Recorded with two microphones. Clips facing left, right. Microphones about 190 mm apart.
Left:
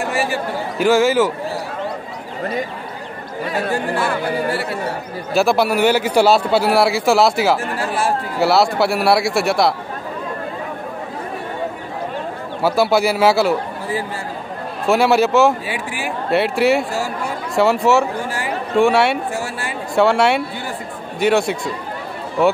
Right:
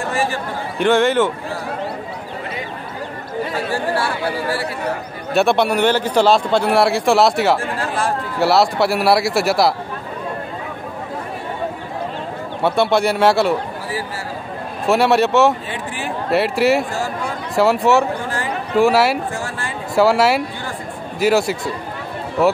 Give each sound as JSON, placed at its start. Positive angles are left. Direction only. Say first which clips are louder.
{"t": 0.7, "sound": "a man's voice", "louder": "left 1 dB", "side_deg": 5}
{"t": 3.7, "sound": "speech", "louder": "right 1 dB", "side_deg": 20}
{"t": 5.3, "sound": "a man's voice", "louder": "even", "side_deg": 0}
{"t": 12.6, "sound": "a man's voice", "louder": "even", "side_deg": 5}
{"t": 14.9, "sound": "a man's voice", "louder": "even", "side_deg": 0}